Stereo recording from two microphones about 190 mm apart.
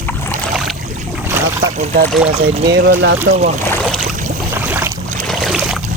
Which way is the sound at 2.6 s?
55° right (ahead or behind).